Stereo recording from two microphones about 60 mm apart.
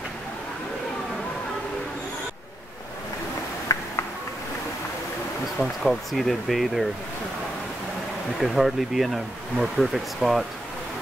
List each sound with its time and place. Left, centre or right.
3.7 s a sound: left
5.6 s speech: centre
8.4 s speech: centre